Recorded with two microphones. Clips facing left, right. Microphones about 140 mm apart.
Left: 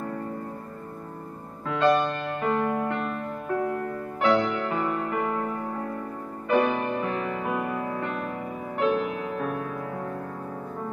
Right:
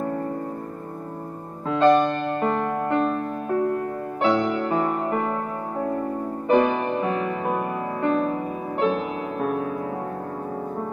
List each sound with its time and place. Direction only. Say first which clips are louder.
1.7 s music: right 5 dB; 35° right (ahead or behind)
4.2 s music: right 2 dB; 30° right (ahead or behind)
6.5 s music: right 3 dB; 30° right (ahead or behind)